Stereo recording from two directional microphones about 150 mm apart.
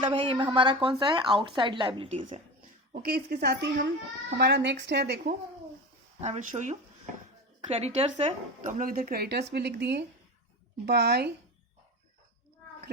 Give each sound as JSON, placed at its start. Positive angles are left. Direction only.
{"t": 0.0, "sound": "speech", "side_deg": -35}
{"t": 2.0, "sound": "speech", "side_deg": -45}
{"t": 2.6, "sound": "speech", "side_deg": -90}
{"t": 6.1, "sound": "speech", "side_deg": -50}
{"t": 8.8, "sound": "speech", "side_deg": -70}